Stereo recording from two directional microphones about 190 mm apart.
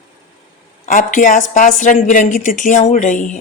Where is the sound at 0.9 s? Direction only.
45° left (ahead or behind).